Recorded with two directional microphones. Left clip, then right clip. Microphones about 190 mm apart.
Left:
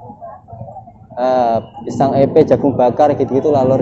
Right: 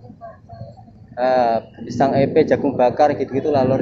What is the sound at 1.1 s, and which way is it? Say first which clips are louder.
Speech: left 3 dB; 20° left (ahead or behind).